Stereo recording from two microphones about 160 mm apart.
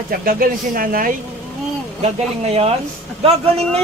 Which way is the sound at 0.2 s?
65° right (ahead or behind).